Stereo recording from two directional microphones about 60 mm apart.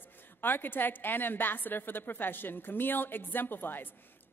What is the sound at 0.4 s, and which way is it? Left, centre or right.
A woman's voice, left.